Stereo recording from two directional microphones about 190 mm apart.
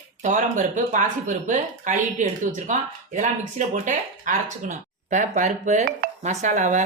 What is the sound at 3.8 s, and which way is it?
Speech, 40° right (ahead or behind).